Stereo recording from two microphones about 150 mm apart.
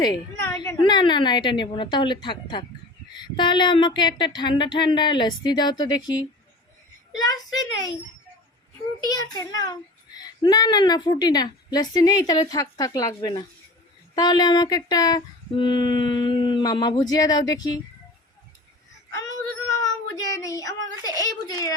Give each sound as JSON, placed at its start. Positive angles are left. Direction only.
{"t": 0.0, "sound": "speech", "side_deg": 20}
{"t": 7.3, "sound": "speech", "side_deg": 25}
{"t": 9.0, "sound": "speech", "side_deg": 25}
{"t": 19.8, "sound": "child singing", "side_deg": 25}
{"t": 21.2, "sound": "speech", "side_deg": 25}